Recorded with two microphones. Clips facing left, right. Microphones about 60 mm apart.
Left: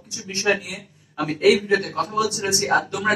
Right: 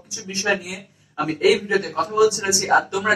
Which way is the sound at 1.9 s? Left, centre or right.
Right.